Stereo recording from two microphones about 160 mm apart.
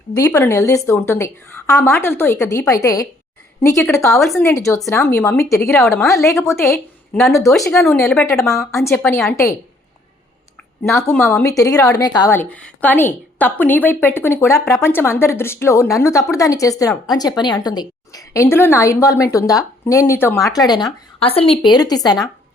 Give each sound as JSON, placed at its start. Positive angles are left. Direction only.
{"t": 0.3, "sound": "a woman's voice", "side_deg": 20}
{"t": 4.2, "sound": "a woman's voice", "side_deg": 0}
{"t": 4.4, "sound": "a woman's voice", "side_deg": 15}
{"t": 8.0, "sound": "a woman's voice", "side_deg": 5}
{"t": 8.3, "sound": "a woman's voice", "side_deg": 20}
{"t": 10.8, "sound": "a woman's voice", "side_deg": 15}
{"t": 12.3, "sound": "a woman's voice", "side_deg": 10}